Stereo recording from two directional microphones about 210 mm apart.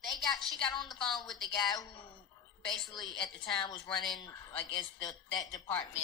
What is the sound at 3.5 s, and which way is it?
A woman's voice, 20° left (ahead or behind).